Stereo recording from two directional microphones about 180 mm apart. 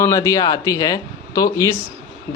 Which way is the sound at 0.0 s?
20° left (ahead or behind).